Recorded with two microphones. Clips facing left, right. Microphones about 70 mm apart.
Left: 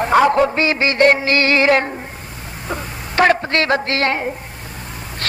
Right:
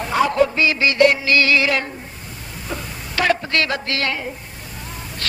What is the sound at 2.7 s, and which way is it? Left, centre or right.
A man's voice, left.